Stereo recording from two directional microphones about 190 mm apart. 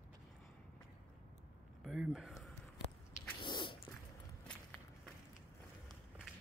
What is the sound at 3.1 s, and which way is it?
Sneeze, 25° left (ahead or behind).